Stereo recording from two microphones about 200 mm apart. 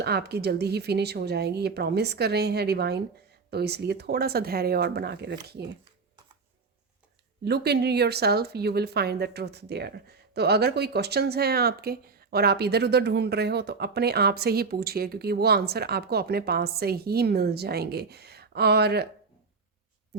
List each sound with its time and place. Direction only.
0.0 s speech: 55° right (ahead or behind)
7.4 s speech: 55° right (ahead or behind)